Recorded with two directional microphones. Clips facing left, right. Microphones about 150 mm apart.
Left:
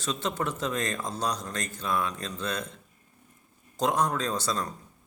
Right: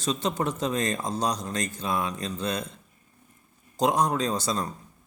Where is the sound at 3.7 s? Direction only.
10° right (ahead or behind).